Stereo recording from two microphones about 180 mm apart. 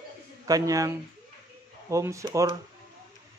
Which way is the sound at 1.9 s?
15° right (ahead or behind).